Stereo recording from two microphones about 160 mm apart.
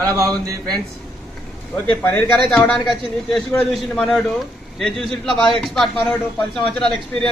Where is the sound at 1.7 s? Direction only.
10° left (ahead or behind).